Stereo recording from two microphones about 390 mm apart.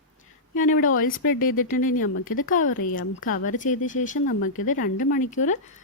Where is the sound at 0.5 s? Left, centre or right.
Centre.